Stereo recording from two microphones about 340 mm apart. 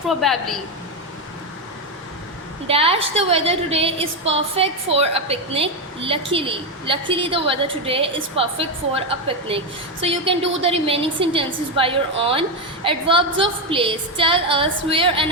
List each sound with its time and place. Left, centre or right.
0.1 s a woman's voice: centre
2.6 s a woman's voice: centre